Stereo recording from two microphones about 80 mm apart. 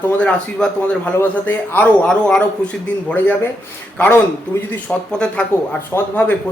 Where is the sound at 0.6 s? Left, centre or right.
Centre.